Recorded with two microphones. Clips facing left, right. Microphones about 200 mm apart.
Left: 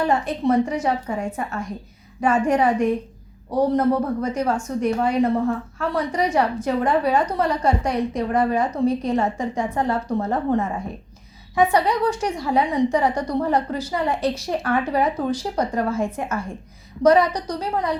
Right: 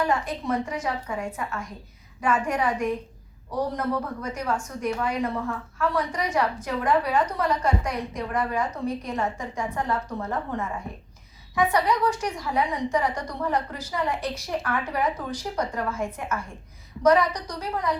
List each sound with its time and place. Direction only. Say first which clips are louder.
0.0 s a woman's voice: left 5 dB; 30° left (ahead or behind)